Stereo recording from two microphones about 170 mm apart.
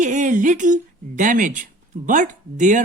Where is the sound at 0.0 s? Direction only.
45° right (ahead or behind).